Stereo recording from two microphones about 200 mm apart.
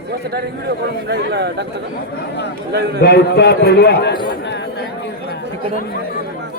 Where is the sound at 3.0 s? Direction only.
55° left (ahead or behind).